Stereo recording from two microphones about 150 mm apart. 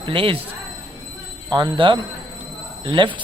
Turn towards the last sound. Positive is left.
turn(degrees=-35)  # may be behind; listen again after turning